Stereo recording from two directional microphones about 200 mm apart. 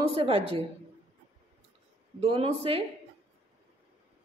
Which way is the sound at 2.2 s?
30° right (ahead or behind).